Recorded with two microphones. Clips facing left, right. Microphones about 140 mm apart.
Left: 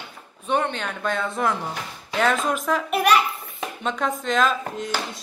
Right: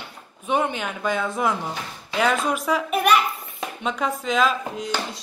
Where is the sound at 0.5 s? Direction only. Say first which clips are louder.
Right 1 dB; 10° right (ahead or behind).